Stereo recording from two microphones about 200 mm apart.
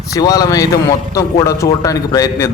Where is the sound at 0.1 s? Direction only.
20° left (ahead or behind).